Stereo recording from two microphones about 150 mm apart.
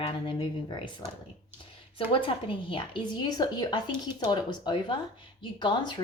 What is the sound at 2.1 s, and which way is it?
A woman's voice, 35° left (ahead or behind).